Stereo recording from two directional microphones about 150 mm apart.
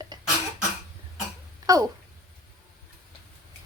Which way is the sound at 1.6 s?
25° right (ahead or behind).